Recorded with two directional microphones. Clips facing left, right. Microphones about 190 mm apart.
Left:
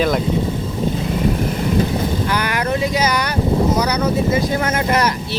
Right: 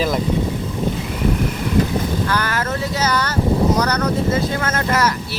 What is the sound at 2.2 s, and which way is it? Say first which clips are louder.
Vehicle: left 1 dB; 15° left (ahead or behind).